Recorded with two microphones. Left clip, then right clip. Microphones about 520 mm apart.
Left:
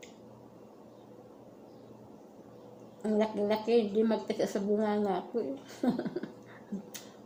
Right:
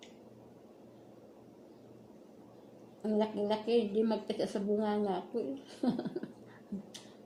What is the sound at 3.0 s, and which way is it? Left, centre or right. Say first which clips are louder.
Speech: left 3 dB; right.